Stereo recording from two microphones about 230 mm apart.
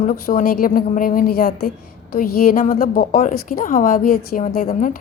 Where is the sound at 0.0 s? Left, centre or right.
Left.